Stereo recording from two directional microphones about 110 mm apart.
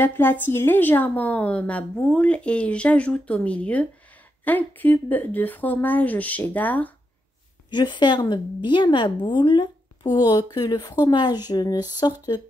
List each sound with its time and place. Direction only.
0.0 s speech: 20° left (ahead or behind)
7.7 s a woman's voice: 45° left (ahead or behind)